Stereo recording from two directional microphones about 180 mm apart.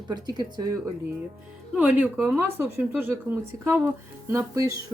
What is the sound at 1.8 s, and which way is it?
Speech, 5° right (ahead or behind).